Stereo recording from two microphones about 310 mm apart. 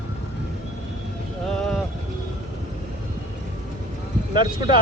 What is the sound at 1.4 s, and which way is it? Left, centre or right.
Speech, centre.